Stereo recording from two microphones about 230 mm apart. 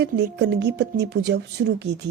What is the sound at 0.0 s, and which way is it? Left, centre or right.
Speech, right.